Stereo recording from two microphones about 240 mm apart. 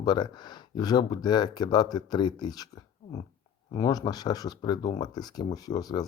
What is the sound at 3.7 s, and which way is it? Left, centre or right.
Speech, centre.